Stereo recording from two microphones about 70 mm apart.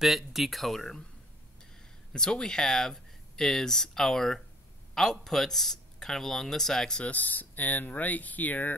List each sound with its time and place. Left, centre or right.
0.0 s speech: centre
2.1 s speech: centre
7.1 s speech: left